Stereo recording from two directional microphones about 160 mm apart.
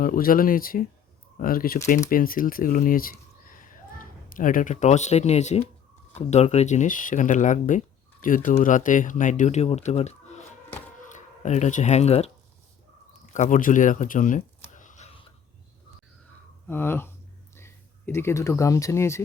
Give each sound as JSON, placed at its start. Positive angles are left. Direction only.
{"t": 0.0, "sound": "speech", "side_deg": 60}
{"t": 13.3, "sound": "a sound", "side_deg": 50}
{"t": 16.6, "sound": "speech", "side_deg": 15}